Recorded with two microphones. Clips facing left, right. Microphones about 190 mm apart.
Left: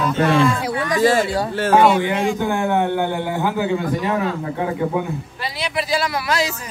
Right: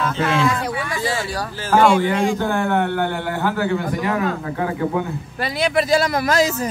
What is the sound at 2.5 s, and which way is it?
A man's voice, 10° left (ahead or behind).